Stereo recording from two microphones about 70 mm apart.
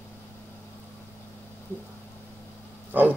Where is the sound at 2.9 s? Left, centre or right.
Right.